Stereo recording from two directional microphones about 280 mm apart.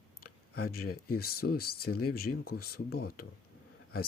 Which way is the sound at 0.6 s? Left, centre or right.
Left.